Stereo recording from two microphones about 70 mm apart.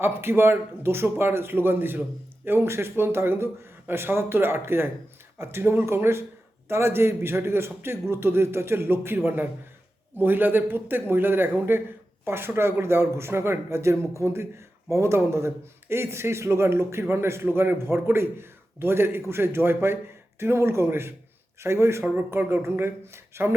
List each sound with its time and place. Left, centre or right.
0.0 s a man's voice: right